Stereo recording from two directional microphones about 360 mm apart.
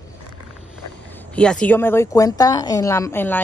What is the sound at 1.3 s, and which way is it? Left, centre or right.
Speech, centre.